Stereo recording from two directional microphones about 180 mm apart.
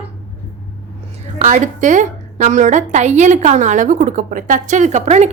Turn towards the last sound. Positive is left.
turn(degrees=-40)  # may be behind; listen again after turning